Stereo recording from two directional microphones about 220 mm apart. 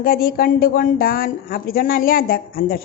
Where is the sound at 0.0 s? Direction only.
40° left (ahead or behind).